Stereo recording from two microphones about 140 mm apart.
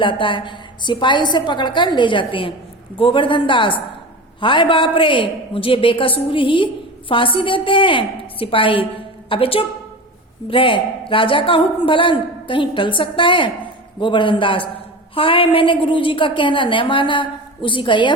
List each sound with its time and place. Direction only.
0.0 s a woman's voice: 35° left (ahead or behind)